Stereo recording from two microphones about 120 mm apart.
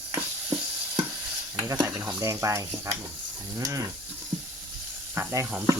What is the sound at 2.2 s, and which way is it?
Speech, 25° right (ahead or behind).